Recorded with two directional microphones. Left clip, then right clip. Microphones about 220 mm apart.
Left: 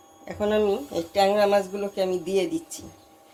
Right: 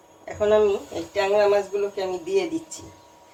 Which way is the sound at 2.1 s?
50° left (ahead or behind).